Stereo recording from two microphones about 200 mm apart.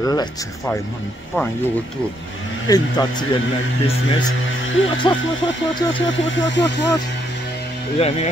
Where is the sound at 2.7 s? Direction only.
20° left (ahead or behind).